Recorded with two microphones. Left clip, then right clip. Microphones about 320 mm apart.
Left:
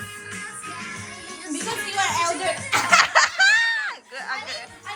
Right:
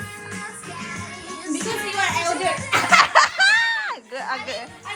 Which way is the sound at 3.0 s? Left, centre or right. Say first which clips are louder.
Right 2 dB; centre.